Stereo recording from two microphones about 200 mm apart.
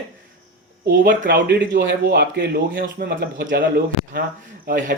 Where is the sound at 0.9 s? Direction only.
45° right (ahead or behind).